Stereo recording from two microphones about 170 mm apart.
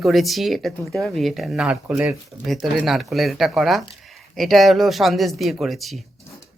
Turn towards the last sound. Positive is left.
turn(degrees=0)  # may be behind; listen again after turning